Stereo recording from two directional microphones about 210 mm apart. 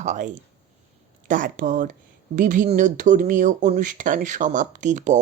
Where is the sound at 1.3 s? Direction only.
40° right (ahead or behind).